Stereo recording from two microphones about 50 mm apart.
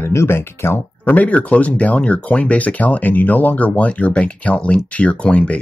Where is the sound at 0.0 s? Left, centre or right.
Left.